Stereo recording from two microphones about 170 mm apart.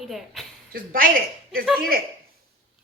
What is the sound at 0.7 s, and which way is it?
Speech, 55° right (ahead or behind).